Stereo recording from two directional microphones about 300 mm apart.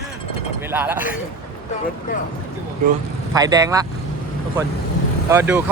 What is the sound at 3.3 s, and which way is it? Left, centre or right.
Speech, centre.